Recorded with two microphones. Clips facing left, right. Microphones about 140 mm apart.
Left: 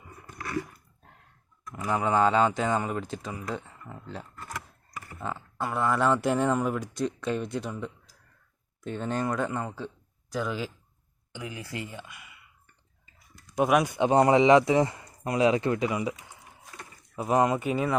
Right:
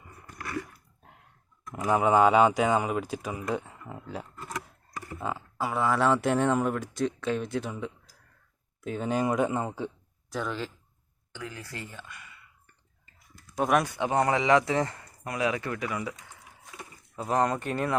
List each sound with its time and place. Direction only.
1.6 s speech: 20° right (ahead or behind)
10.2 s speech: centre (ahead or behind)
11.3 s speech: 15° left (ahead or behind)
13.8 s speech: 20° left (ahead or behind)